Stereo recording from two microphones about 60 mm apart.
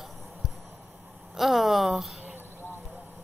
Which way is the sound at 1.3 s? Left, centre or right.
Centre.